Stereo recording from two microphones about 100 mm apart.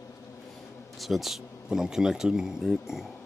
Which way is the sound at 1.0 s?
Centre (ahead or behind).